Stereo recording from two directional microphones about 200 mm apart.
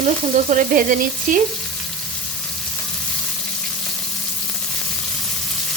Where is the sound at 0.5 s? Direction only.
40° right (ahead or behind).